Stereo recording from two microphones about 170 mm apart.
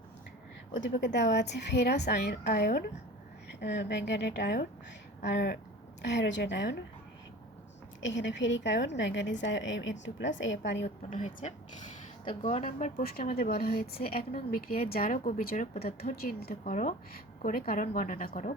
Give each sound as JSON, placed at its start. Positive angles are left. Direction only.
{"t": 0.7, "sound": "a woman's voice", "side_deg": 90}
{"t": 3.6, "sound": "a woman's voice", "side_deg": 85}
{"t": 8.0, "sound": "a woman's voice", "side_deg": 90}
{"t": 10.8, "sound": "speech", "side_deg": 45}